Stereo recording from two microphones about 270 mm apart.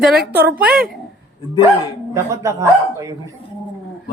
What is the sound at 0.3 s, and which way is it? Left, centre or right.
Speech, centre.